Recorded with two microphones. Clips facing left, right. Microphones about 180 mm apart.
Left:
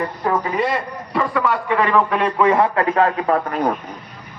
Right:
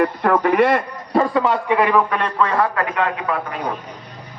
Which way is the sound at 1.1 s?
35° right (ahead or behind).